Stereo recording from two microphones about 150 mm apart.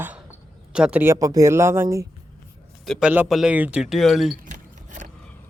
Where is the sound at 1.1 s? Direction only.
25° right (ahead or behind); by 4.4 s centre (ahead or behind).